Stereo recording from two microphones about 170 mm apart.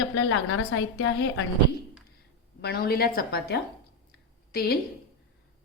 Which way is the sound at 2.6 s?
65° left (ahead or behind).